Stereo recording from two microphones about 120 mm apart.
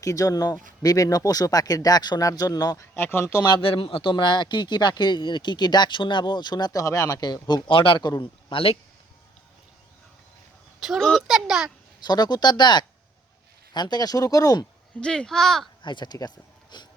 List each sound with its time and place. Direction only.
0.0 s speech: 30° left (ahead or behind)
2.9 s speech: 20° left (ahead or behind)
3.4 s speech: 45° left (ahead or behind)
10.8 s a child's voice: 5° right (ahead or behind)
11.9 s speech: 35° left (ahead or behind)
15.0 s a child's voice: 5° left (ahead or behind)
15.8 s speech: 40° left (ahead or behind)